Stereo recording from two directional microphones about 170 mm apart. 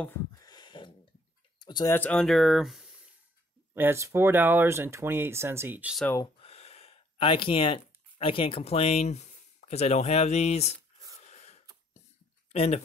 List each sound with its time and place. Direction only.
0.4 s a sound: 25° left (ahead or behind)
1.9 s speech: 10° left (ahead or behind)
3.7 s speech: 15° right (ahead or behind)
6.4 s speech: 40° left (ahead or behind)
11.1 s wheeze: 40° left (ahead or behind)
12.5 s speech: 40° left (ahead or behind)